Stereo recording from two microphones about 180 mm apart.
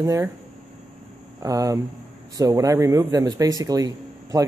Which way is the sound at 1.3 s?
20° right (ahead or behind).